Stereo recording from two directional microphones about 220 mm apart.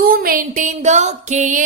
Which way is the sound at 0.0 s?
40° right (ahead or behind).